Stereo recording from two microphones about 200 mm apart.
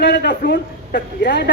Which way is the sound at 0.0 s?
55° left (ahead or behind).